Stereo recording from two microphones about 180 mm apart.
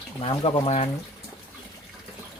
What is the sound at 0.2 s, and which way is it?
Speech, 30° left (ahead or behind).